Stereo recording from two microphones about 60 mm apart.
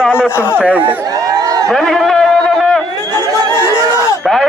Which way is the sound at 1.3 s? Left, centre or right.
Right.